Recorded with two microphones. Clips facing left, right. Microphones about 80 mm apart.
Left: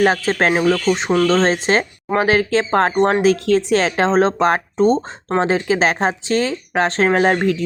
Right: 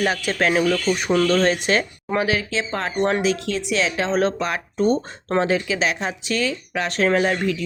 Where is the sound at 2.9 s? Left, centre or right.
Left.